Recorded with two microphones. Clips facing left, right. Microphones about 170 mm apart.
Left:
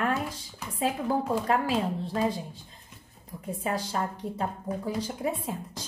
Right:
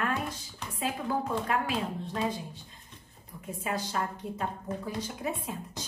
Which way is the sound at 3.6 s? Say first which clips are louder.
Left 2 dB; 30° left (ahead or behind).